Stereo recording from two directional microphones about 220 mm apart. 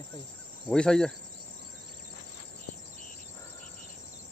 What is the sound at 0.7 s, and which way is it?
Insect, 5° left (ahead or behind).